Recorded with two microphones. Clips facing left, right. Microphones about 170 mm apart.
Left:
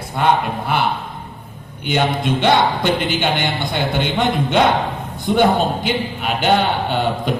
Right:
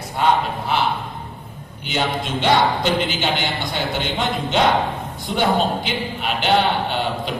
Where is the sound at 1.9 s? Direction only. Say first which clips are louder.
Left 5 dB; 55° left (ahead or behind).